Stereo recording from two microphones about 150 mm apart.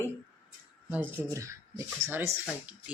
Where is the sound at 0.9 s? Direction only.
15° right (ahead or behind).